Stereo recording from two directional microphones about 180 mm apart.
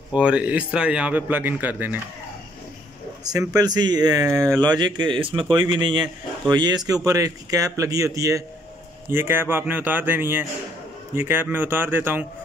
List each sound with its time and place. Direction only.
0.1 s a man's voice: 5° right (ahead or behind)
3.3 s a man's voice: 20° right (ahead or behind)